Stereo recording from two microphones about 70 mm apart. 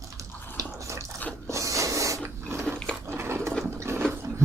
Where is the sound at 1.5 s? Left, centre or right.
Right.